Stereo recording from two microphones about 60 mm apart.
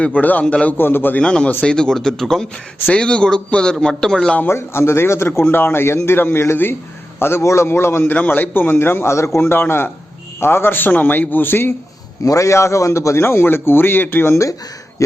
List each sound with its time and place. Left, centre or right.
0.2 s a man's voice: left
0.8 s a man's voice: left
1.2 s a man's voice: centre
4.4 s a man's voice: left
8.1 s a man's voice: left
9.4 s a man's voice: left
12.2 s a man's voice: left